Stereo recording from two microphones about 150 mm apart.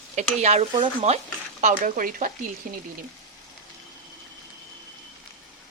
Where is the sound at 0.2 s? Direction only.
50° right (ahead or behind).